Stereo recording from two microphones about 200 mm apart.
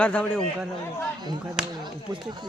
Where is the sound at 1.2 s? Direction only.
20° right (ahead or behind).